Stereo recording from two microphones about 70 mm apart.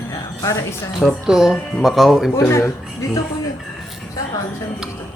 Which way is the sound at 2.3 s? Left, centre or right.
Left.